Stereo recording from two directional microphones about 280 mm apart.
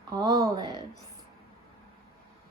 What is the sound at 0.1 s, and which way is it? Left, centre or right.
Speech, centre.